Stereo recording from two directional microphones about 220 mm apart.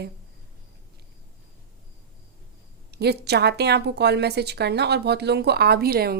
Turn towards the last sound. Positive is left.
turn(degrees=-45)  # may be behind; listen again after turning